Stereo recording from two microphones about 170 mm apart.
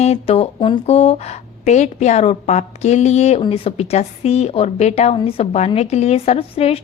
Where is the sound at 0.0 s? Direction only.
35° left (ahead or behind).